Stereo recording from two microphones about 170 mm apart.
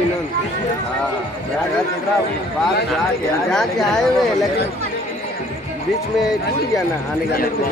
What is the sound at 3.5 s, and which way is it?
A man's voice, 5° left (ahead or behind).